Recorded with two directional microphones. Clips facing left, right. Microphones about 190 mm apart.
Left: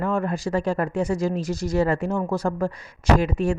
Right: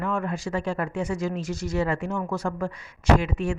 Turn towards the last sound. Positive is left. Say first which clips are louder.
# left 2 dB
turn(degrees=35)  # may be behind; listen again after turning